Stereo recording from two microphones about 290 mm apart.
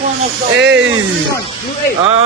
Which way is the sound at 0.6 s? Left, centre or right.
Right.